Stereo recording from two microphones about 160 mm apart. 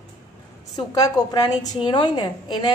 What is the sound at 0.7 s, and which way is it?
A woman's voice, 25° left (ahead or behind).